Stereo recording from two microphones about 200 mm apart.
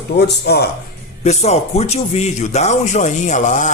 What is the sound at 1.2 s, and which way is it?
Speech, 35° left (ahead or behind).